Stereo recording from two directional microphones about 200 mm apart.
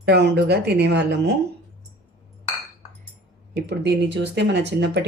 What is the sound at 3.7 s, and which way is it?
Speech, 55° right (ahead or behind).